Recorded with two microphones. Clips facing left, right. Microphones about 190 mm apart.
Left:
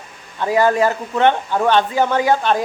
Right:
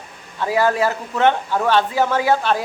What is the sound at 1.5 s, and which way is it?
Speech, 20° left (ahead or behind).